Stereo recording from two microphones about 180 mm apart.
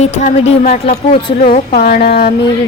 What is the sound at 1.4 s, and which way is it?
Speech, 55° left (ahead or behind).